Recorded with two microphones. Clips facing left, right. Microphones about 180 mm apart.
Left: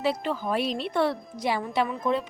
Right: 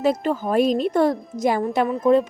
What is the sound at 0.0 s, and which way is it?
A woman's voice, 45° right (ahead or behind).